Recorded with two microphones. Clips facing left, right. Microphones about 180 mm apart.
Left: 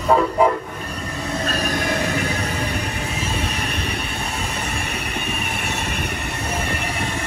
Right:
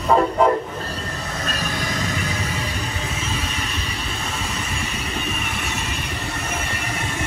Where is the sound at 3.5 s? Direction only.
60° left (ahead or behind).